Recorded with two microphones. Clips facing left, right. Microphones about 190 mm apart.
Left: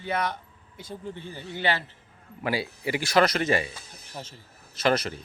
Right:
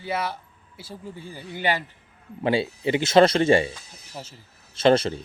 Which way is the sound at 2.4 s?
25° right (ahead or behind).